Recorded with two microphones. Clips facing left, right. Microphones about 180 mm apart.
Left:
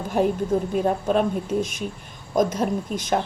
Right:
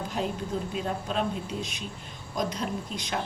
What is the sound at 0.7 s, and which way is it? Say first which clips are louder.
A woman's voice: left 10 dB; 50° left (ahead or behind).